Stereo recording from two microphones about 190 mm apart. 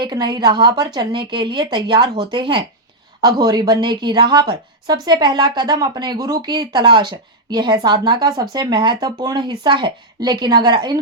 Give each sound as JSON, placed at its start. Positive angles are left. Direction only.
{"t": 0.0, "sound": "a woman's voice", "side_deg": -25}